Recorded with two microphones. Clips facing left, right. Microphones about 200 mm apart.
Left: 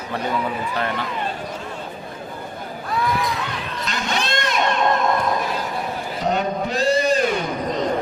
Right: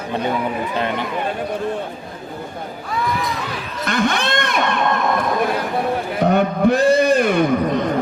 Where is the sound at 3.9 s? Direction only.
55° right (ahead or behind).